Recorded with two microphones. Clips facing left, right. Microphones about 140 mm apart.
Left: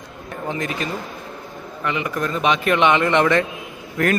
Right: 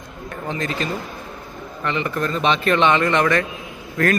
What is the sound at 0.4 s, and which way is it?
A man's voice, 15° left (ahead or behind).